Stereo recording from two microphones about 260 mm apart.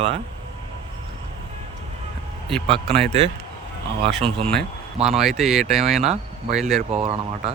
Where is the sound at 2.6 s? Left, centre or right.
Right.